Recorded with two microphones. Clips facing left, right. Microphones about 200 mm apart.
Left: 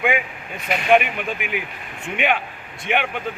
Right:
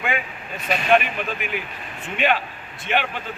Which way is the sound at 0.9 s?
15° left (ahead or behind).